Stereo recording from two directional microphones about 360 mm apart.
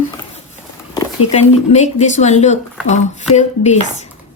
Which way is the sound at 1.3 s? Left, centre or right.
Centre.